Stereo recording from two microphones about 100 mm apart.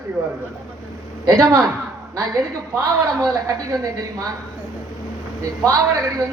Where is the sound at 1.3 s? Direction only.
35° right (ahead or behind).